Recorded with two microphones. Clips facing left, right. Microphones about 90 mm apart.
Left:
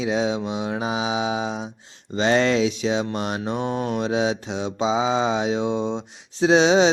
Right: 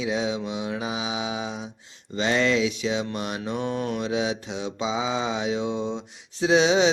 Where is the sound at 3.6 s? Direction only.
15° left (ahead or behind).